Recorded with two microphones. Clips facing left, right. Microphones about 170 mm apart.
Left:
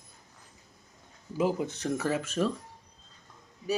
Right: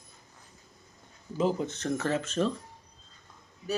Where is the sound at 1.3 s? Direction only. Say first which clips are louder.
Even; 10° left (ahead or behind).